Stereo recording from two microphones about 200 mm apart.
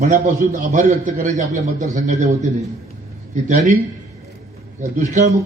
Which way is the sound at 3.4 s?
35° right (ahead or behind).